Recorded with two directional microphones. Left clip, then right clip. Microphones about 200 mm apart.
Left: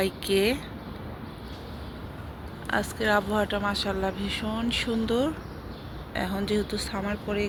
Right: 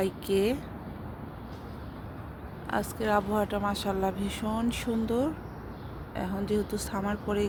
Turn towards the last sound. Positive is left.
turn(degrees=-20)  # may be behind; listen again after turning